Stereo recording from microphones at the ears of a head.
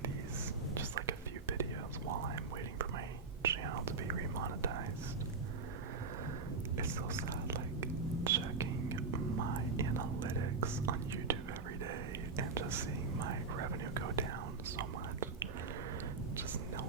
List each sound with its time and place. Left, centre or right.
0.7 s whispering: right
3.4 s whispering: right
6.7 s whispering: right
12.4 s whispering: right